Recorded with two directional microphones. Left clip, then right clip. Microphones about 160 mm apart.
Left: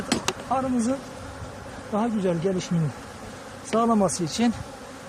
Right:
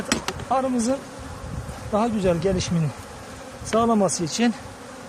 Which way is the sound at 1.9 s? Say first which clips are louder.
Right 4 dB; 20° right (ahead or behind).